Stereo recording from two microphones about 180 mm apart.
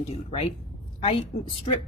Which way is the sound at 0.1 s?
35° left (ahead or behind).